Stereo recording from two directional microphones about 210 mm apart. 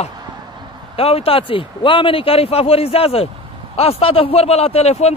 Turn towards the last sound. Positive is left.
turn(degrees=30)  # may be behind; listen again after turning